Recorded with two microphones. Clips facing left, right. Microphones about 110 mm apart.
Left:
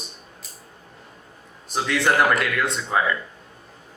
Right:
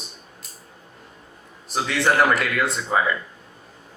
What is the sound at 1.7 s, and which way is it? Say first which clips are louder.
A man's voice: even; centre (ahead or behind).